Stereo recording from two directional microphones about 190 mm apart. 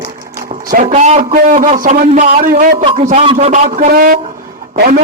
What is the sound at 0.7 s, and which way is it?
A man's voice, 45° right (ahead or behind).